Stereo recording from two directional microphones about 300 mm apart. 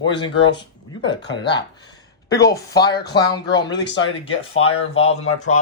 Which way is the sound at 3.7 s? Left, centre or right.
Left.